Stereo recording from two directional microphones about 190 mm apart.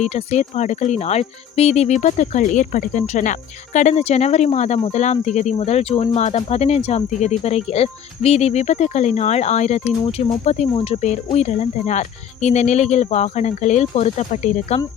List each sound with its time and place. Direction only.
0.0 s speech: 35° left (ahead or behind)